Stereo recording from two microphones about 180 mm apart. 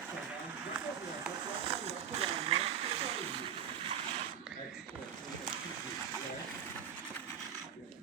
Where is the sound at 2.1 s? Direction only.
35° right (ahead or behind).